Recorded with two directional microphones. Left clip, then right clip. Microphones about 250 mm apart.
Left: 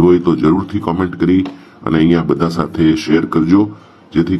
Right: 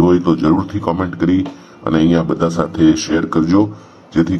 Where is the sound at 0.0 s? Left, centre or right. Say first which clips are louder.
Left 2 dB; centre.